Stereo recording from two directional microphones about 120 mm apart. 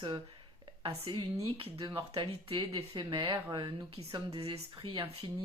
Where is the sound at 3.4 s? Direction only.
40° right (ahead or behind).